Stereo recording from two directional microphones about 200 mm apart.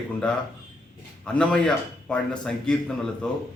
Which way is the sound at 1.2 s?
5° left (ahead or behind).